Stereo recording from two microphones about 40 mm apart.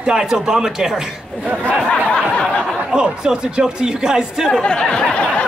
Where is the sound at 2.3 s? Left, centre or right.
Left.